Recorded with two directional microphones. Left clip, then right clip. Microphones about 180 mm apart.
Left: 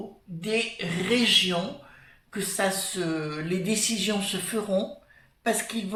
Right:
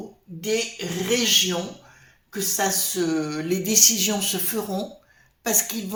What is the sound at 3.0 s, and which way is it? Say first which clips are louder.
Speech: right 5 dB; 45° right (ahead or behind).